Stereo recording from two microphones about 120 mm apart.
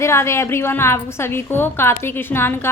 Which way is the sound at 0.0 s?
20° left (ahead or behind).